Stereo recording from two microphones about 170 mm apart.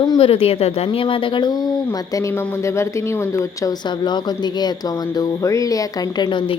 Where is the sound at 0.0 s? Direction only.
30° left (ahead or behind).